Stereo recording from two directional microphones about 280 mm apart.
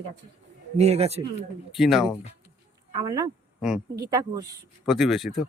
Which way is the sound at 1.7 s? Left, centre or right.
Centre.